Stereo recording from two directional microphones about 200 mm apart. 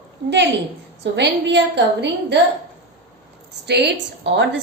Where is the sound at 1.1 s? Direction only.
60° right (ahead or behind).